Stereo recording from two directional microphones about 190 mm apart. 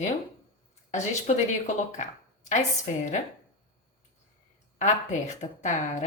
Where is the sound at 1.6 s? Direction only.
40° left (ahead or behind).